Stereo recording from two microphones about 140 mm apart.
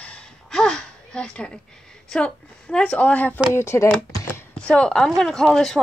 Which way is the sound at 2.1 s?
5° left (ahead or behind).